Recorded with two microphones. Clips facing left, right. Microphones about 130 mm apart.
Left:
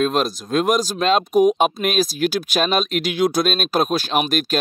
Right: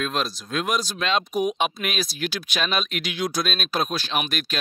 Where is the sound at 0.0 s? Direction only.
45° left (ahead or behind).